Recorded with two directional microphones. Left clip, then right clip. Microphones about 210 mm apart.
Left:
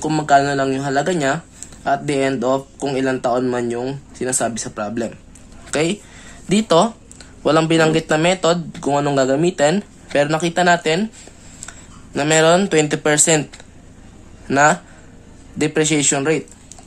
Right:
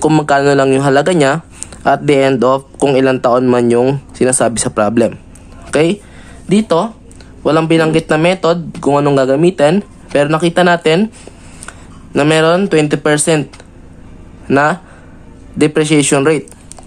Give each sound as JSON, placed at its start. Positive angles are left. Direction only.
{"t": 0.0, "sound": "speech", "side_deg": -20}
{"t": 5.7, "sound": "speech", "side_deg": -10}
{"t": 6.5, "sound": "speech", "side_deg": 5}
{"t": 14.5, "sound": "speech", "side_deg": -10}